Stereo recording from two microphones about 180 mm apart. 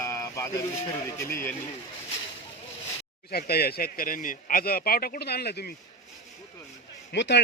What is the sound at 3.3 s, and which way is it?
Speech, 60° left (ahead or behind).